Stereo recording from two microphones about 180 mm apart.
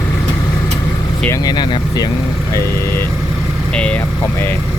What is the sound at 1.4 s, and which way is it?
Speech, 25° left (ahead or behind).